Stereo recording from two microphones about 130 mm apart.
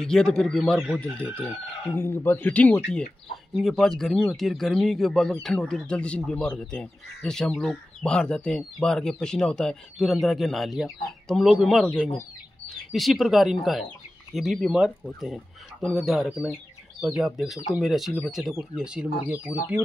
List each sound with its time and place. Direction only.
0.0 s a man's voice: 5° left (ahead or behind)
3.5 s speech: centre (ahead or behind)